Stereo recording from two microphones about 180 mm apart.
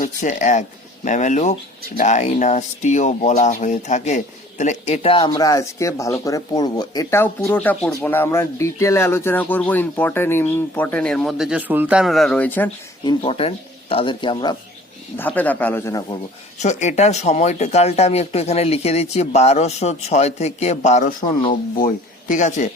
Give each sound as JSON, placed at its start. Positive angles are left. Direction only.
{"t": 0.0, "sound": "speech", "side_deg": 45}
{"t": 13.1, "sound": "a man's voice", "side_deg": 30}
{"t": 15.2, "sound": "speech", "side_deg": 10}
{"t": 16.6, "sound": "speech", "side_deg": 40}